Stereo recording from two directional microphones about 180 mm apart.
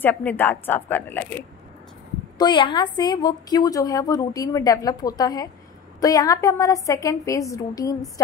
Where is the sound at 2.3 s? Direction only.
25° left (ahead or behind).